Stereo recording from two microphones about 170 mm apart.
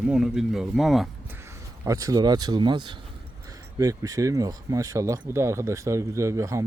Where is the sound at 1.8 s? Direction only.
20° right (ahead or behind).